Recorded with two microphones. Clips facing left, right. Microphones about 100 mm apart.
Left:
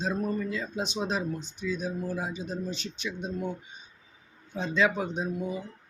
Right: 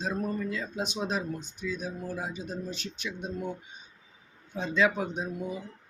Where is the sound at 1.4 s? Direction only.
45° right (ahead or behind).